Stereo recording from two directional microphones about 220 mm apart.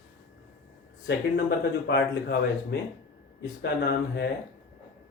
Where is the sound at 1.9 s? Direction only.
50° left (ahead or behind).